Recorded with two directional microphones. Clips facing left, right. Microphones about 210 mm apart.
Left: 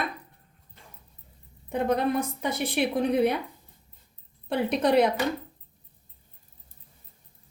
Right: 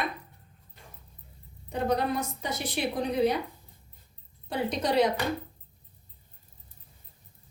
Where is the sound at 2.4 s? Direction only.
60° left (ahead or behind).